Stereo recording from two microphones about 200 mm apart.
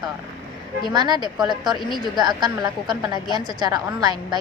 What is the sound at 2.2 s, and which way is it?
Speech, 20° right (ahead or behind).